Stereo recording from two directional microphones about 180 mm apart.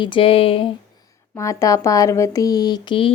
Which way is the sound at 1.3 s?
15° left (ahead or behind).